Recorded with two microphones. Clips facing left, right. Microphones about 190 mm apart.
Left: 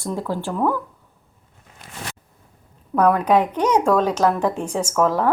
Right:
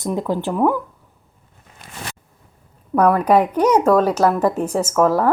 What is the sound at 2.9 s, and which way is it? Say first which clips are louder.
Speech: right 2 dB; 5° right (ahead or behind).